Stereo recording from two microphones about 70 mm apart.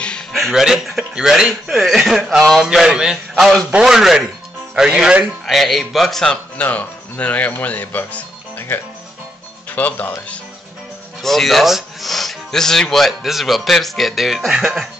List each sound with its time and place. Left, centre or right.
0.0 s a sound: centre
0.3 s a man's voice: centre
2.6 s a man's voice: centre
5.5 s speech: centre; by 10.1 s left
11.1 s speech: centre